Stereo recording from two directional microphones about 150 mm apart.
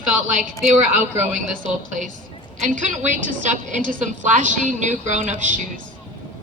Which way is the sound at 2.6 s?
60° right (ahead or behind).